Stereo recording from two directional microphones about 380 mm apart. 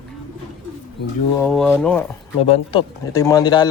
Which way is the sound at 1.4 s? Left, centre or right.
Centre.